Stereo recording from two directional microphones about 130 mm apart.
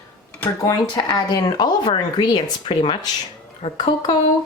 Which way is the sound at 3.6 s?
35° left (ahead or behind).